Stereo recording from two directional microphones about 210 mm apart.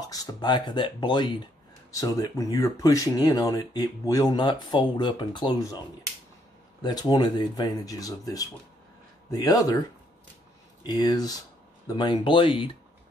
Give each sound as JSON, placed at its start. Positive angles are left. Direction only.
{"t": 0.1, "sound": "speech", "side_deg": 20}
{"t": 6.8, "sound": "speech", "side_deg": 20}
{"t": 10.9, "sound": "speech", "side_deg": 20}